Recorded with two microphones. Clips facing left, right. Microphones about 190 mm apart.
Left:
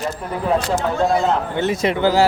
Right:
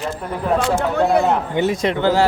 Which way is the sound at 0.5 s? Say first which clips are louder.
Right 4 dB; 40° left (ahead or behind).